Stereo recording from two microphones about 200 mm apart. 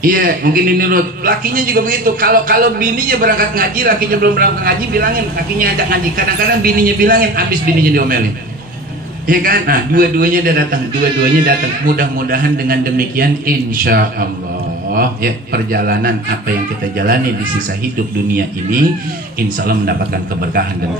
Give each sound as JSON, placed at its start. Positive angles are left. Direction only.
{"t": 0.0, "sound": "a man's voice", "side_deg": -45}
{"t": 9.3, "sound": "a man's voice", "side_deg": -45}
{"t": 19.6, "sound": "a man's voice", "side_deg": -50}